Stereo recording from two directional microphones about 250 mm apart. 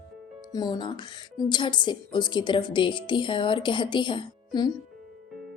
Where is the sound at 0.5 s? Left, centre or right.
Centre.